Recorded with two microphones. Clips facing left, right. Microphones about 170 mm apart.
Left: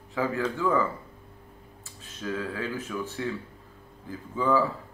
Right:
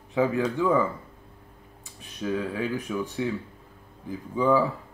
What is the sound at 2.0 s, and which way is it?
Speech, 15° right (ahead or behind).